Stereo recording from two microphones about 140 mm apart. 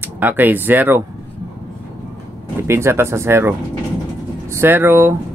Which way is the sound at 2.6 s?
20° right (ahead or behind).